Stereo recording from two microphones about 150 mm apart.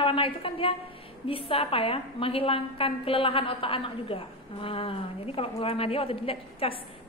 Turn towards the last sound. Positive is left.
turn(degrees=40)  # may be behind; listen again after turning